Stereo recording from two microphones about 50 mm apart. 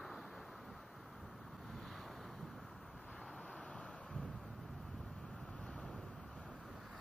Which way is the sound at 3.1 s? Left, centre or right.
Centre.